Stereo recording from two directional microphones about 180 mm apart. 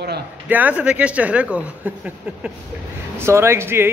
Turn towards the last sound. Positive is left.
turn(degrees=-15)  # may be behind; listen again after turning